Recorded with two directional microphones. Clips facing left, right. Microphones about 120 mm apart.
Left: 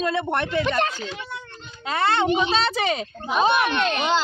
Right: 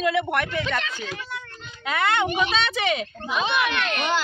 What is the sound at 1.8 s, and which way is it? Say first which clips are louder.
Speech: left 2 dB; 30° left (ahead or behind).